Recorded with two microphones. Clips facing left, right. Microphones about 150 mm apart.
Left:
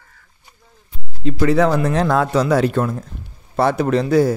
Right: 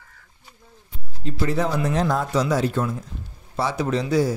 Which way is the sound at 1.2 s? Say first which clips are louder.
Left 8 dB; 85° left.